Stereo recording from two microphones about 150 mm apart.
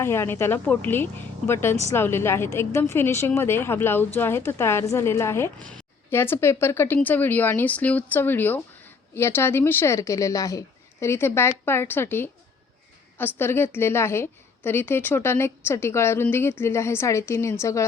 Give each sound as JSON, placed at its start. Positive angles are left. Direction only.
{"t": 0.0, "sound": "a woman's voice", "side_deg": 15}